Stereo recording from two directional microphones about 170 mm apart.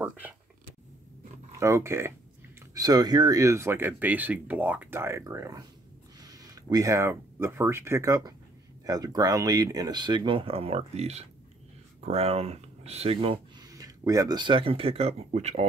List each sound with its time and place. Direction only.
0.0 s speech: 10° right (ahead or behind)
1.6 s speech: 15° right (ahead or behind); by 13.7 s 35° right (ahead or behind)
13.7 s speech: 20° right (ahead or behind); by 15.6 s 40° right (ahead or behind)